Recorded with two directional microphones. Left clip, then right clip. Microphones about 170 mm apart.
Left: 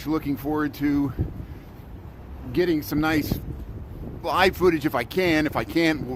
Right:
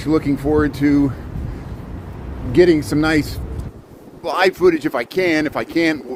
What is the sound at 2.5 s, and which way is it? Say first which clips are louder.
Speech: right 10 dB; 25° left (ahead or behind).